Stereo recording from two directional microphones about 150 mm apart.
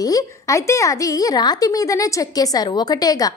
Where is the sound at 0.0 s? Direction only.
20° left (ahead or behind).